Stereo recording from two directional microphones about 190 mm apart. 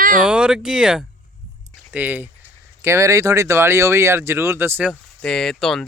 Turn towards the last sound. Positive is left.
turn(degrees=0)  # may be behind; listen again after turning